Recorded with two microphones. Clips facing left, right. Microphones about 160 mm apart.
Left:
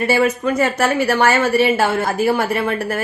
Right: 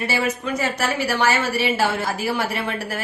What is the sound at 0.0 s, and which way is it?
A woman's voice, 55° left (ahead or behind).